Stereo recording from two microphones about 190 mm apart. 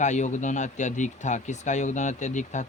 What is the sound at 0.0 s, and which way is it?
Speech, 40° left (ahead or behind).